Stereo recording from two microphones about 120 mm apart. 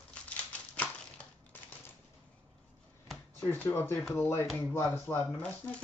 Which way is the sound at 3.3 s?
20° left (ahead or behind).